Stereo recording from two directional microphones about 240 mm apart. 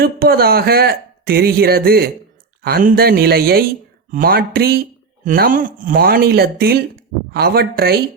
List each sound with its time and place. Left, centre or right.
0.0 s speech: right